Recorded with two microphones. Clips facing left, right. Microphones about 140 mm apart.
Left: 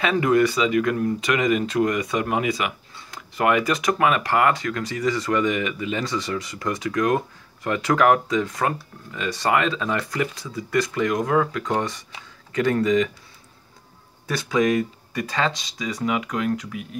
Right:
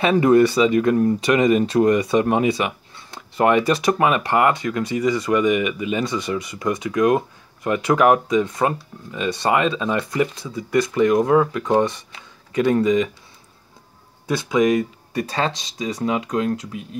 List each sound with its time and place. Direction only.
0.0 s speech: 30° right (ahead or behind)
14.2 s speech: 20° right (ahead or behind)